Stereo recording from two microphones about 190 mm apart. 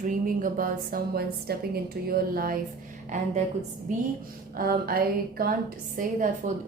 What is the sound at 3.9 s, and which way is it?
A woman's voice, 45° right (ahead or behind).